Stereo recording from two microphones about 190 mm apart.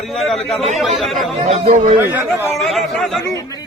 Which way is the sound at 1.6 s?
40° right (ahead or behind).